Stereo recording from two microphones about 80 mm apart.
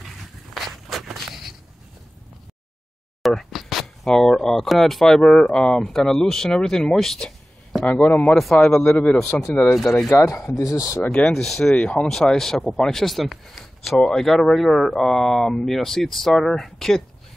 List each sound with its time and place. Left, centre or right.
0.0 s walk: centre
3.2 s speech: centre
8.2 s a man's voice: centre
9.7 s speech: centre
10.0 s speech: left
11.3 s speech: centre
11.7 s speech: centre